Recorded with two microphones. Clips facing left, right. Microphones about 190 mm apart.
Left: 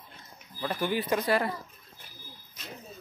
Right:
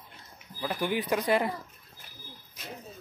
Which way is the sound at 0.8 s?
15° right (ahead or behind).